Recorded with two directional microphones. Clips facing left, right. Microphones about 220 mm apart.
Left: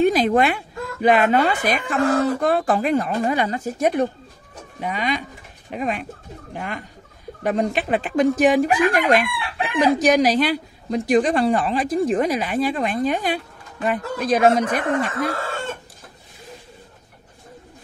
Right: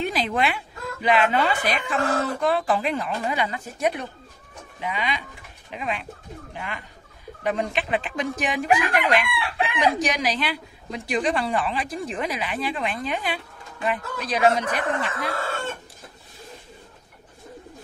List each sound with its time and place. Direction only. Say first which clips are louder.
0.0 s speech: left 8 dB; 45° left (ahead or behind)